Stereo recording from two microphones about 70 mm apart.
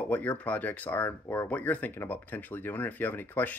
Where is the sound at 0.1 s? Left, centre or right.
Left.